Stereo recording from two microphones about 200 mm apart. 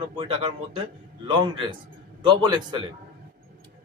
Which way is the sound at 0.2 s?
25° right (ahead or behind).